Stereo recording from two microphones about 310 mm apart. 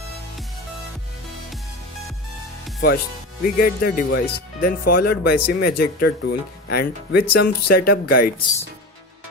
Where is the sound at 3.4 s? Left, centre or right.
Left.